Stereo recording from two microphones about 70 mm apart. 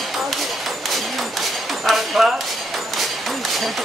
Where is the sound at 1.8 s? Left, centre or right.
Centre.